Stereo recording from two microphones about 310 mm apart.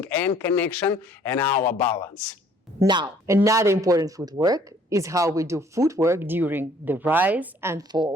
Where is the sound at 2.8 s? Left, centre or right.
Centre.